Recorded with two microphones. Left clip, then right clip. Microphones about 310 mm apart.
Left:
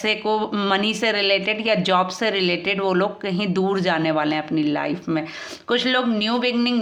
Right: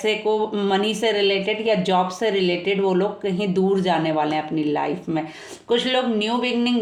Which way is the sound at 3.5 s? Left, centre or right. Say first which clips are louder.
Right 1 dB; left.